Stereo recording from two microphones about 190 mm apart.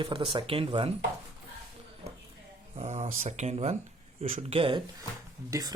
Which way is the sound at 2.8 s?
35° right (ahead or behind).